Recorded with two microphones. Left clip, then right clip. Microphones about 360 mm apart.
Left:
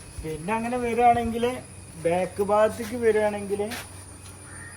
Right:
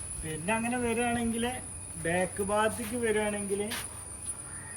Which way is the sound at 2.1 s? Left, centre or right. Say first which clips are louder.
Left 7 dB; centre.